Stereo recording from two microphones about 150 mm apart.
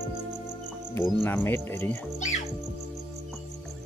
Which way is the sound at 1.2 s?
15° left (ahead or behind).